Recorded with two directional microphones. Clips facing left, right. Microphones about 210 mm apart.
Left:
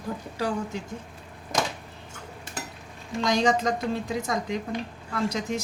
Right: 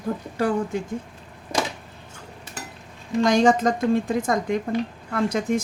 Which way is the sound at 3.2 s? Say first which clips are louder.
Right 6 dB; 50° right (ahead or behind).